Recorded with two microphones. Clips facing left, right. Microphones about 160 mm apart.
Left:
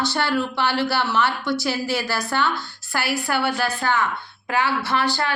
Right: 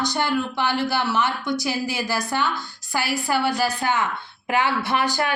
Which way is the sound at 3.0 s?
5° right (ahead or behind).